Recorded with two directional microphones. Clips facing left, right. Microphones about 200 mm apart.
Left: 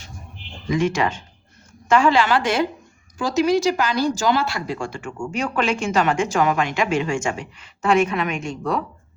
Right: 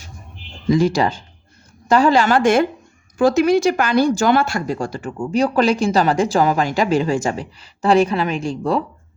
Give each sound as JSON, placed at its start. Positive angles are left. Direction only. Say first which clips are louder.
{"t": 0.7, "sound": "a woman's voice", "louder": "right 5 dB", "side_deg": -35}